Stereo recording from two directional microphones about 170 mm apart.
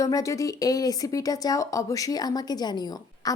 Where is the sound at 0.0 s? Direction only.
20° left (ahead or behind).